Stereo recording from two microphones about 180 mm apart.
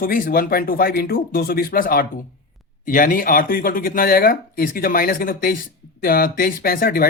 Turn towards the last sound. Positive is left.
turn(degrees=55)  # may be behind; listen again after turning